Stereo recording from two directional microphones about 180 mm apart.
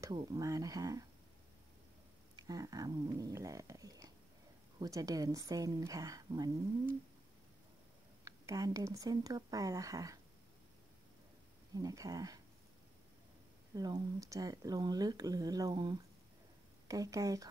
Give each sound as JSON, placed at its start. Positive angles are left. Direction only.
{"t": 0.0, "sound": "speech", "side_deg": -20}
{"t": 2.3, "sound": "speech", "side_deg": -20}
{"t": 8.2, "sound": "speech", "side_deg": -20}
{"t": 11.7, "sound": "speech", "side_deg": -20}
{"t": 13.7, "sound": "speech", "side_deg": -20}